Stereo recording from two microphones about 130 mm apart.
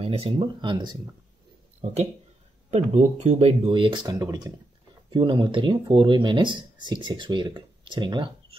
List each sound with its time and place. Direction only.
0.0 s a sound: 50° right (ahead or behind)
0.4 s speech: 35° right (ahead or behind)
2.7 s speech: 55° right (ahead or behind); by 4.6 s 30° right (ahead or behind)
5.1 s speech: 40° right (ahead or behind)